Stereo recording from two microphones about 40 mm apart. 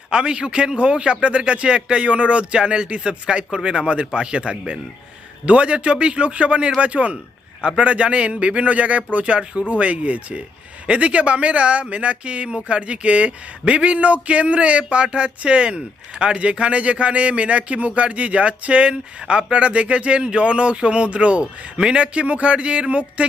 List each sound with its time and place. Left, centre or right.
0.1 s speech: right